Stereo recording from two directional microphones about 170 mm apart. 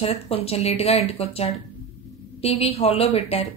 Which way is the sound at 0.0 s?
35° left (ahead or behind).